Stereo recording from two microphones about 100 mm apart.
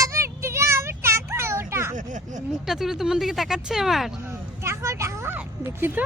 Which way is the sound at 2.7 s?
5° right (ahead or behind).